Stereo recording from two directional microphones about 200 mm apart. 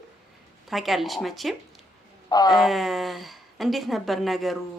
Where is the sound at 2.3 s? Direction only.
20° left (ahead or behind).